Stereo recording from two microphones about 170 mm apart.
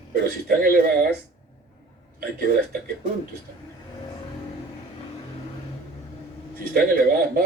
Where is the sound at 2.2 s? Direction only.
60° right (ahead or behind).